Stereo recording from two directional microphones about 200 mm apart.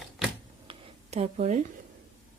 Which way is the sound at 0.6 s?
30° right (ahead or behind).